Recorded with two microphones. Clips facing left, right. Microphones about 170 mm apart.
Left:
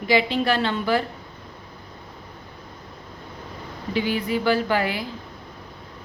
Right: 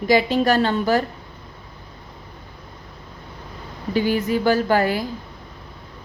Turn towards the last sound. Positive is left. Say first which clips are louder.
# right 4 dB
turn(degrees=-45)  # may be behind; listen again after turning